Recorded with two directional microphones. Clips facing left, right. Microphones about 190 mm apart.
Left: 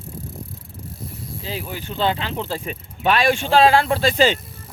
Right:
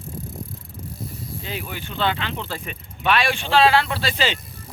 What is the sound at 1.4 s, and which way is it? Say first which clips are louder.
Speech: left 4 dB; 35° left (ahead or behind).